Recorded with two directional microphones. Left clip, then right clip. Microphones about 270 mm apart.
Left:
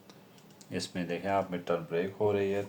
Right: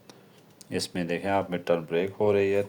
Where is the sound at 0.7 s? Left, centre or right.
Right.